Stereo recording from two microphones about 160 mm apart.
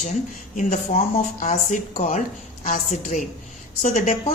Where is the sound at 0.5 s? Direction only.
50° left (ahead or behind).